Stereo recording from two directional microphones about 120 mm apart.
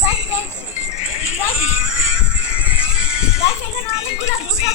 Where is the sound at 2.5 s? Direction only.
10° right (ahead or behind).